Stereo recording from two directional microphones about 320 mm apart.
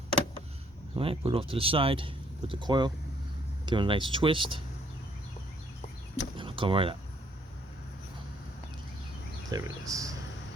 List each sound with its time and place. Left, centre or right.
0.9 s speech: centre
6.3 s door: centre
9.5 s speech: centre